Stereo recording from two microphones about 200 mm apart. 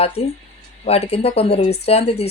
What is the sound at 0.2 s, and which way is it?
Speech, 30° left (ahead or behind).